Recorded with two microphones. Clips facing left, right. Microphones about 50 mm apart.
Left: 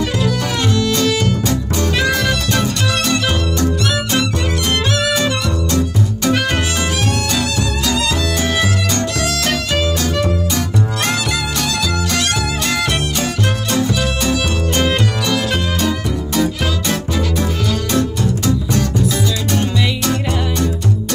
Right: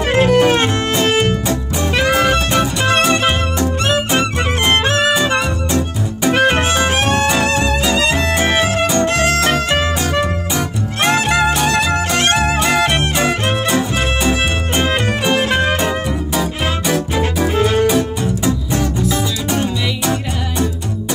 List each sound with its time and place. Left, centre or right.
0.0 s music: right
18.4 s music: right